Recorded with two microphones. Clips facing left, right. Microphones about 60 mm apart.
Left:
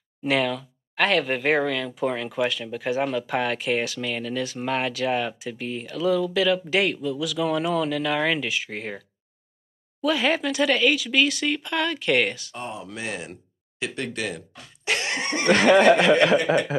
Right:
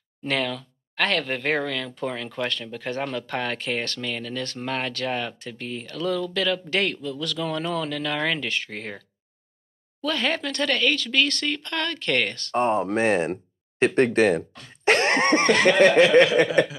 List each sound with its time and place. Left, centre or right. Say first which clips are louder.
0.2 s speech: left 3 dB; centre
10.0 s speech: left 3 dB; centre
12.5 s speech: right 12 dB; right
14.7 s cough: right 7 dB; right
15.6 s speech: left 3 dB; centre